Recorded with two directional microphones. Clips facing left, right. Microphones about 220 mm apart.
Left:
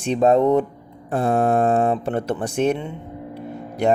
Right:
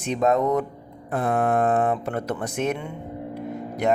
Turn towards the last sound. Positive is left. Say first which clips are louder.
# left 3 dB
turn(degrees=30)  # may be behind; listen again after turning